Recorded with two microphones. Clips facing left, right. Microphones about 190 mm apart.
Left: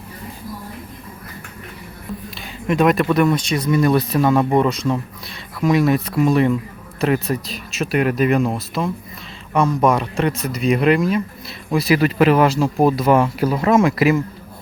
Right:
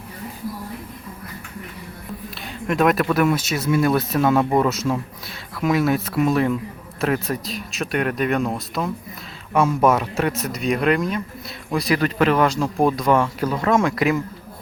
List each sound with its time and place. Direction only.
2.6 s speech: centre (ahead or behind)